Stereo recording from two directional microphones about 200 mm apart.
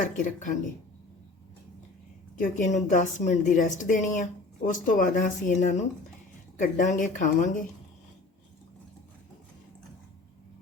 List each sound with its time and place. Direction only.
0.0 s a woman's voice: 40° left (ahead or behind)
2.4 s a woman's voice: 40° left (ahead or behind)